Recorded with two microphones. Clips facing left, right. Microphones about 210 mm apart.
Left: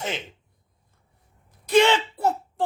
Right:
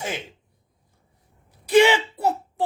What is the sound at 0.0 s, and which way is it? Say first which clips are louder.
Speech: even; 10° right (ahead or behind).